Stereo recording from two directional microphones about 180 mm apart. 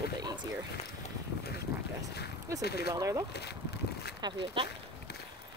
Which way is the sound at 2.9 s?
20° right (ahead or behind).